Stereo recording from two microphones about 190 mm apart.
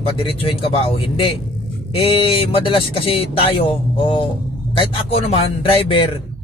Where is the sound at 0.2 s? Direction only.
30° left (ahead or behind).